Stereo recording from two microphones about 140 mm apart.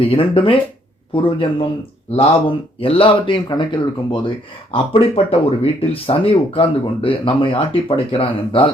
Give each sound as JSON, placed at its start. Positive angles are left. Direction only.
{"t": 0.0, "sound": "speech", "side_deg": 40}